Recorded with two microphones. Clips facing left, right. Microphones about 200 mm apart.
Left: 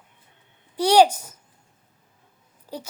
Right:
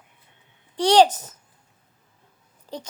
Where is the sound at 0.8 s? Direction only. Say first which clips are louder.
Even; 10° left (ahead or behind).